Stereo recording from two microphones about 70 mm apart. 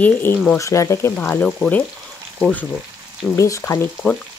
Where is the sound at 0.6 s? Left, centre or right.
Left.